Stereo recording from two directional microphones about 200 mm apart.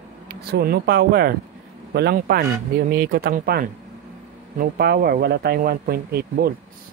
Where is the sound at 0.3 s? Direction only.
50° right (ahead or behind).